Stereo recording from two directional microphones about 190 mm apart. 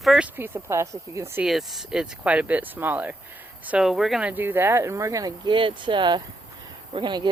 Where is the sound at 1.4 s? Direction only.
Centre (ahead or behind).